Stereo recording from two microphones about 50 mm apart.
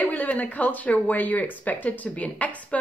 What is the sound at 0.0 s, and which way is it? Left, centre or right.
Speech, left.